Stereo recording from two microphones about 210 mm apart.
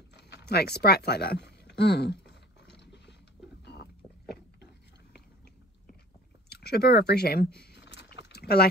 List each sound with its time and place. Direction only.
0.1 s speech: 55° left (ahead or behind)
2.6 s ratchet: 55° left (ahead or behind)
6.5 s a sound: 50° left (ahead or behind)
8.3 s rowboat: 50° left (ahead or behind)